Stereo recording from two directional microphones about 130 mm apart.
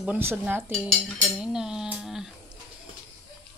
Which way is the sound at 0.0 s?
15° right (ahead or behind).